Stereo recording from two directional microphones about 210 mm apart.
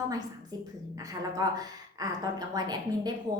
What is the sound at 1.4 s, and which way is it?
A woman's voice, 20° right (ahead or behind).